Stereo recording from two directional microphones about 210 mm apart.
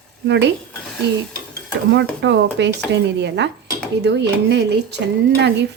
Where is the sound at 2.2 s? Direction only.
55° right (ahead or behind).